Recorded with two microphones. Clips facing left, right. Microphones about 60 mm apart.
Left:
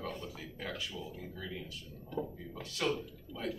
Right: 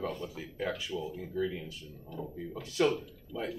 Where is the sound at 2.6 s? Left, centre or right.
Centre.